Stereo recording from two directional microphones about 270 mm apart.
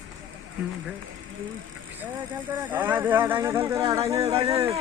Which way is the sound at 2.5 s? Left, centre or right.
Centre.